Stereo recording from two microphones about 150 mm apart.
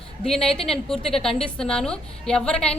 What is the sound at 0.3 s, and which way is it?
A woman's voice, 5° left (ahead or behind).